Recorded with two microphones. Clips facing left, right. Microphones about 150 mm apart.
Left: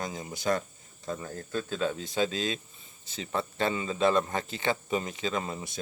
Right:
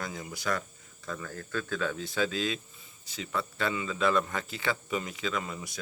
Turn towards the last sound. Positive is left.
turn(degrees=30)  # may be behind; listen again after turning